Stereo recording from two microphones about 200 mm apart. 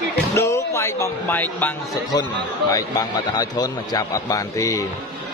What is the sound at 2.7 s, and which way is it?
A man's voice, 20° left (ahead or behind).